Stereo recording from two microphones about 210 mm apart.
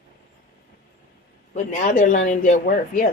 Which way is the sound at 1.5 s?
35° left (ahead or behind).